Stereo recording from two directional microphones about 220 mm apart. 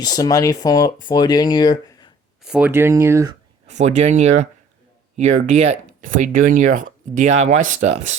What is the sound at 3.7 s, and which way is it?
Speech, 30° right (ahead or behind).